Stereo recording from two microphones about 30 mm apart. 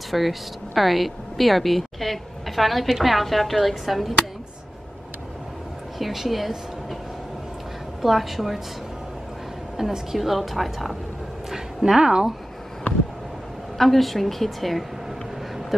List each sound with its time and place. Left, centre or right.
0.1 s speech: centre
5.9 s speech: centre
8.0 s speech: centre
9.8 s speech: centre
11.8 s speech: right
13.7 s speech: centre